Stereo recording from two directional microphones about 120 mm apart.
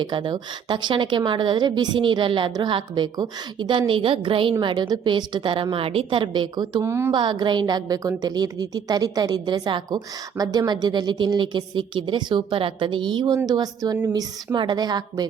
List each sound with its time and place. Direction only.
0.0 s a woman's voice: 40° right (ahead or behind)
6.8 s a woman's voice: 20° right (ahead or behind)
7.1 s a woman's voice: 40° right (ahead or behind)